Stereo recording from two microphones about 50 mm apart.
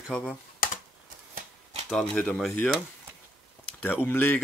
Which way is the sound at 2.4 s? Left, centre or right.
Centre.